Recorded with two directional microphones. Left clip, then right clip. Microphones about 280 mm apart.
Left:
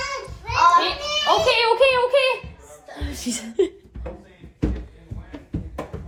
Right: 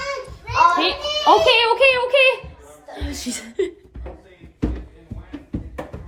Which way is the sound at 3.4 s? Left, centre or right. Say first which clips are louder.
Left 3 dB; centre.